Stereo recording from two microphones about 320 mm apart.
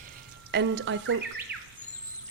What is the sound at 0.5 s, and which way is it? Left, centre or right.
Speech, right.